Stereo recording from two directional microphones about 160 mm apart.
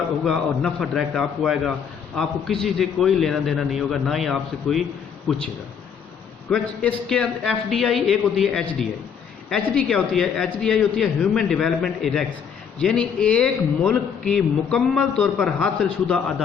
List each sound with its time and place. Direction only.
0.3 s a man's voice: centre (ahead or behind)
6.5 s a man's voice: 5° left (ahead or behind)